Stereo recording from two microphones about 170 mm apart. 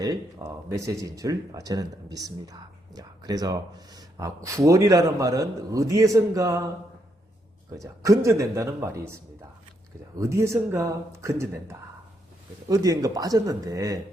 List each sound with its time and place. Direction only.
0.0 s speech: 20° right (ahead or behind)
7.8 s speech: 20° right (ahead or behind)
10.2 s speech: 15° right (ahead or behind)